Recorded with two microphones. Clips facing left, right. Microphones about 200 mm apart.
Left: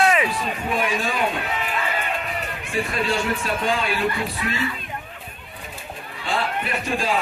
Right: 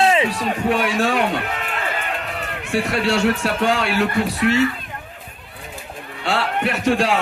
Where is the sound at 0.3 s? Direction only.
80° right.